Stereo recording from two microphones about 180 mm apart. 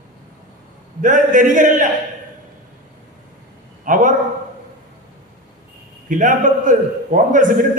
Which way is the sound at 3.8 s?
45° right (ahead or behind).